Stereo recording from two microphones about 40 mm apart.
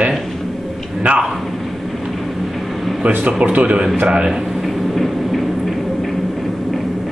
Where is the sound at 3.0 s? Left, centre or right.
Right.